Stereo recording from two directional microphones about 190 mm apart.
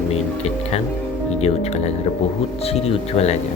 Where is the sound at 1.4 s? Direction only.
35° left (ahead or behind).